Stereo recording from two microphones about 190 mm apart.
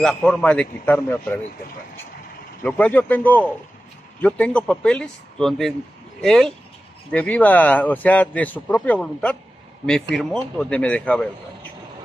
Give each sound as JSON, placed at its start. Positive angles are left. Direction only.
{"t": 0.0, "sound": "speech", "side_deg": 5}
{"t": 2.6, "sound": "a man's voice", "side_deg": 5}